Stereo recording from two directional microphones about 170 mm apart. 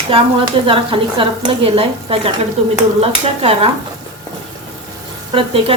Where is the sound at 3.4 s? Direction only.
35° right (ahead or behind).